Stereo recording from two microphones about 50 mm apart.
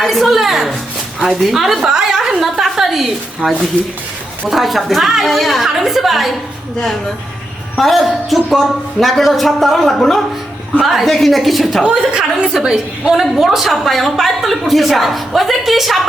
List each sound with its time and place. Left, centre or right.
0.0 s a woman's voice: centre
7.8 s a woman's voice: centre
11.8 s a woman's voice: centre